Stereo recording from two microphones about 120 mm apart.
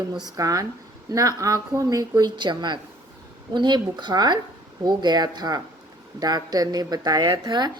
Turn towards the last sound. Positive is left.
turn(degrees=-35)  # may be behind; listen again after turning